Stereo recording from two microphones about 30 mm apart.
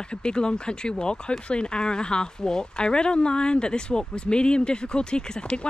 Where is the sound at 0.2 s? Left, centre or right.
Left.